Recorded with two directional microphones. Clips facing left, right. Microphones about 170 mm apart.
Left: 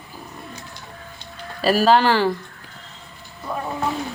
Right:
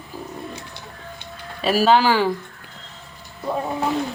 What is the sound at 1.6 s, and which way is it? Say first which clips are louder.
Speech: even; centre (ahead or behind).